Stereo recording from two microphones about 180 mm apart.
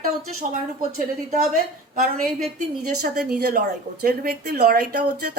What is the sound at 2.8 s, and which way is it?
A woman's voice, 55° right (ahead or behind).